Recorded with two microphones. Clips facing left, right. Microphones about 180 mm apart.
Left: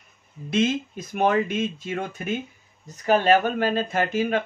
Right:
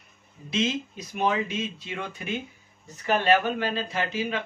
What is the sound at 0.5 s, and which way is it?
Speech, 50° left (ahead or behind).